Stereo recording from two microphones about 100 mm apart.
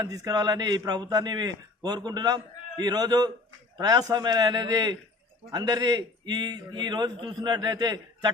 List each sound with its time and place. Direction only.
0.0 s a man's voice: 35° right (ahead or behind)